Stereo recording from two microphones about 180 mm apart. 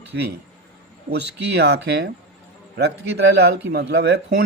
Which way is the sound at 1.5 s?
70° right (ahead or behind).